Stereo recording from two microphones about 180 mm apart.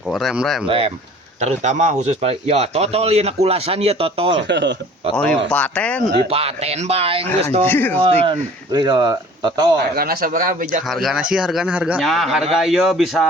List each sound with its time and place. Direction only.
0.1 s a man's voice: centre (ahead or behind)
0.7 s a man's voice: 30° right (ahead or behind)
4.4 s speech: 80° right
5.1 s a man's voice: 5° left (ahead or behind)
6.3 s a man's voice: 35° right (ahead or behind)
7.7 s speech: 10° left (ahead or behind)
7.9 s speech: 30° right (ahead or behind)
9.9 s speech: 55° right (ahead or behind)
10.8 s a man's voice: centre (ahead or behind)